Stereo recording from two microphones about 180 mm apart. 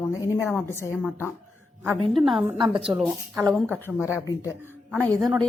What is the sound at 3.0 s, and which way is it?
Speech, 15° right (ahead or behind).